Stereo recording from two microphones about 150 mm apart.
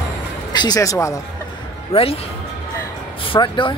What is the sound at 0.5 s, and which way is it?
Speech, 25° left (ahead or behind).